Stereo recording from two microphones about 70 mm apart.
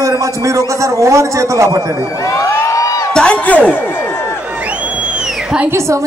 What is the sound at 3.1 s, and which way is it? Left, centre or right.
Speech, centre.